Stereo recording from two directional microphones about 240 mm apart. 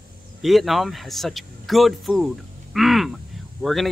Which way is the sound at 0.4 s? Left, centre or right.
Centre.